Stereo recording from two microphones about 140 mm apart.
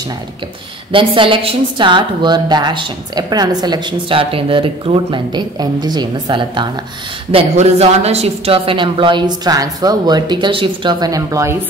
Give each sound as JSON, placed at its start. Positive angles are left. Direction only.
{"t": 0.9, "sound": "a woman's voice", "side_deg": -35}
{"t": 7.2, "sound": "a woman's voice", "side_deg": -45}